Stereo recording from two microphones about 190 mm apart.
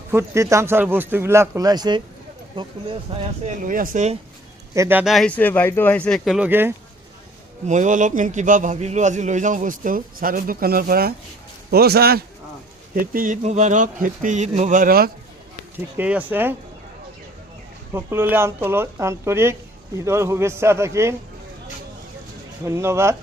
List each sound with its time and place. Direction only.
0.1 s speech: 15° right (ahead or behind); by 3.2 s 30° right (ahead or behind)
3.4 s speech: 40° right (ahead or behind)
4.7 s speech: 15° right (ahead or behind)
7.7 s a man's voice: 40° right (ahead or behind)
15.7 s speech: 10° right (ahead or behind)
17.9 s speech: 10° right (ahead or behind)
22.6 s speech: 15° right (ahead or behind)